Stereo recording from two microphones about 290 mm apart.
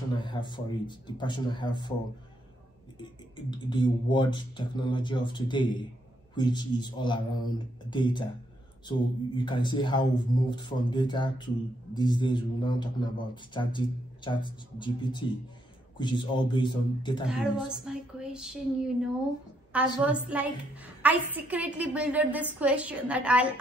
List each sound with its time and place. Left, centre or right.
0.2 s a man's voice: centre
3.0 s a man's voice: centre
17.3 s a woman's voice: centre